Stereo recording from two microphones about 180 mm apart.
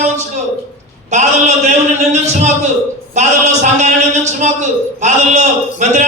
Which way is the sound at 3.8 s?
40° right (ahead or behind).